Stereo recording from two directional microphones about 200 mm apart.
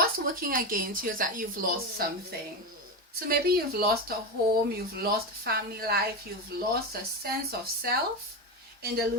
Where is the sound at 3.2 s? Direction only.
50° right (ahead or behind).